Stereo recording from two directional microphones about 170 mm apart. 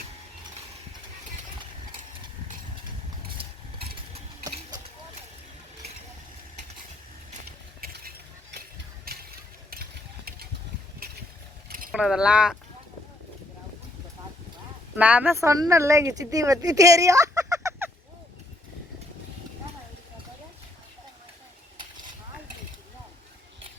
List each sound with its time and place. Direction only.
3.2 s mechanisms: 35° right (ahead or behind)
7.8 s stir: 60° right (ahead or behind)
9.0 s mechanisms: 65° right (ahead or behind)
11.0 s a sound: 60° right (ahead or behind)
11.9 s speech: 5° right (ahead or behind)
14.9 s speech: 10° right (ahead or behind)